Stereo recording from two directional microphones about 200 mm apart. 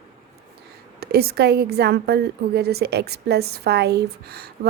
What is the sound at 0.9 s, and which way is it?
A woman's voice, 50° right (ahead or behind).